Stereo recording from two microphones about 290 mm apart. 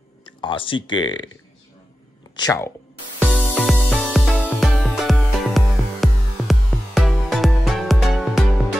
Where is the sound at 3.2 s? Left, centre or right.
Centre.